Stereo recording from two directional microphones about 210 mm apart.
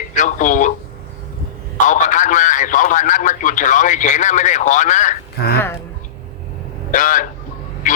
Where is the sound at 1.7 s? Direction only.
35° left (ahead or behind).